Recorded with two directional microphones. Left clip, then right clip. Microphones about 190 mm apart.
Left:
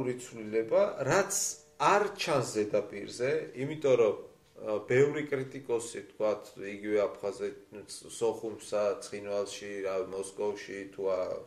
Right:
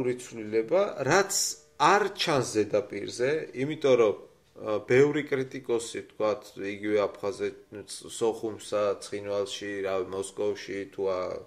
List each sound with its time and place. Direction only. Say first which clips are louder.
0.0 s speech: right 5 dB; 40° right (ahead or behind)